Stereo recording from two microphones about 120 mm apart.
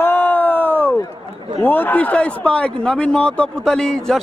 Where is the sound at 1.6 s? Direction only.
15° left (ahead or behind).